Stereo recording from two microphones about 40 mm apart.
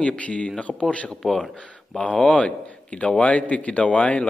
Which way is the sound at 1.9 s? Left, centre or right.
Left.